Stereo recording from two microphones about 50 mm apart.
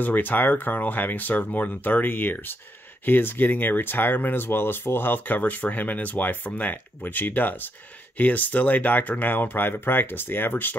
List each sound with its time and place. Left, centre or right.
0.0 s speech: left